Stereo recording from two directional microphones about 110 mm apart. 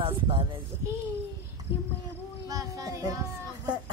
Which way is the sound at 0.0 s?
50° right (ahead or behind).